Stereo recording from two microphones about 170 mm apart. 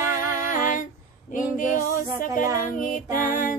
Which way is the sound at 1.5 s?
50° left (ahead or behind).